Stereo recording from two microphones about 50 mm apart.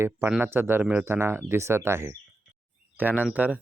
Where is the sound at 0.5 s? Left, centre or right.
Right.